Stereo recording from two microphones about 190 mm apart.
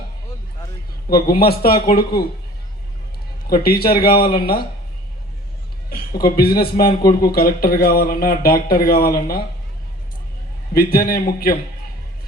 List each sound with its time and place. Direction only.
1.1 s speech: 55° left (ahead or behind)
3.5 s speech: 55° left (ahead or behind)
5.9 s speech: 50° left (ahead or behind)
10.8 s speech: 50° left (ahead or behind)